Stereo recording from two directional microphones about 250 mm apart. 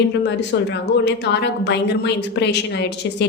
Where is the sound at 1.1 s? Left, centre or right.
Left.